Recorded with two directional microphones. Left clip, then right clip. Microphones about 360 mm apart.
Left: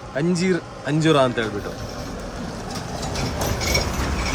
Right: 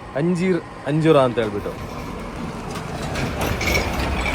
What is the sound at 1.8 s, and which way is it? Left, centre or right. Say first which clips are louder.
Vehicle: right 1 dB; right.